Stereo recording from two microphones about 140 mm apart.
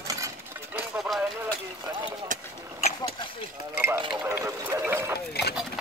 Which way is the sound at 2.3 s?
70° right (ahead or behind).